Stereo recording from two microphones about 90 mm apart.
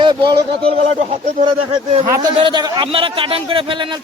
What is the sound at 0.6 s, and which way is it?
A man's voice, 85° right.